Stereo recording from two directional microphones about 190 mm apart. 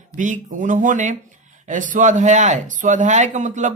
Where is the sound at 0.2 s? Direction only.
40° right (ahead or behind).